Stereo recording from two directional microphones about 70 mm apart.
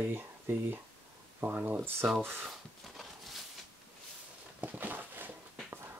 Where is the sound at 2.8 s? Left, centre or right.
Centre.